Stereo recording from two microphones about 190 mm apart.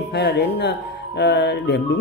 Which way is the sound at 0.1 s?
60° left (ahead or behind).